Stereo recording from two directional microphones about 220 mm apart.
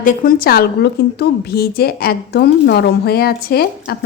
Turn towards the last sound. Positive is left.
turn(degrees=45)  # may be behind; listen again after turning